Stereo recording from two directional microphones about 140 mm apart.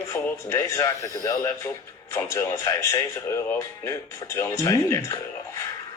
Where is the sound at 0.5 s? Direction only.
25° left (ahead or behind).